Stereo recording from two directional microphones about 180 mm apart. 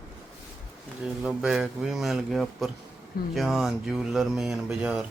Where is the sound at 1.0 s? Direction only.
5° right (ahead or behind).